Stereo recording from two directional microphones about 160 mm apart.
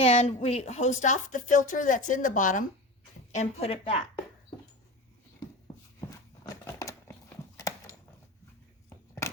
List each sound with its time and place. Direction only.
0.0 s speech: 40° left (ahead or behind)
3.3 s a woman's voice: 40° left (ahead or behind)
6.1 s a sound: 20° left (ahead or behind)